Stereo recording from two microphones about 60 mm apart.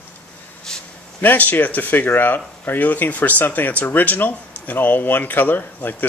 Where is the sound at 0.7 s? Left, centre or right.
Centre.